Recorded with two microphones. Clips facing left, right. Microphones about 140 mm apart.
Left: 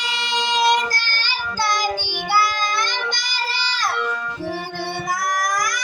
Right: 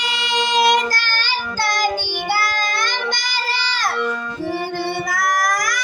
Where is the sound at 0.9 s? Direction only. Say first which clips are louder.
Right 3 dB; 60° right (ahead or behind).